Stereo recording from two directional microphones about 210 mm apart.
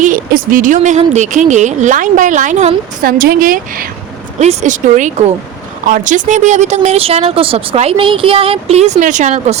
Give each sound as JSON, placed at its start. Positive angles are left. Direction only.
{"t": 0.0, "sound": "speech", "side_deg": -40}